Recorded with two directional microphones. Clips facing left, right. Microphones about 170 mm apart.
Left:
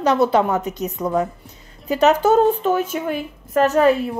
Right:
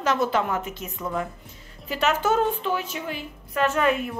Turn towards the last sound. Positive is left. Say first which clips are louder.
# left 7 dB
turn(degrees=35)  # may be behind; listen again after turning